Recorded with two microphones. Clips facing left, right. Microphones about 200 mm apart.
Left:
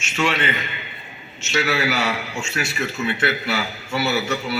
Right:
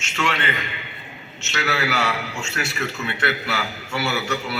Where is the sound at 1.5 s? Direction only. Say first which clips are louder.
Left 2 dB; 15° left (ahead or behind).